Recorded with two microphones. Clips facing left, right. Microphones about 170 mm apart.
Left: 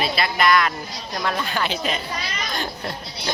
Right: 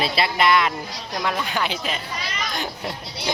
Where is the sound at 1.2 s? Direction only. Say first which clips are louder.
Even; 10° right (ahead or behind).